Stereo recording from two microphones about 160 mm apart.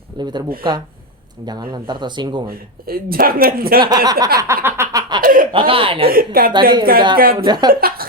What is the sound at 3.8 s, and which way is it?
Speech, 25° right (ahead or behind).